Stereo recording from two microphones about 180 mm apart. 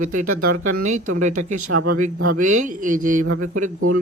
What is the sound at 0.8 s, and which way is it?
Speech, 45° right (ahead or behind).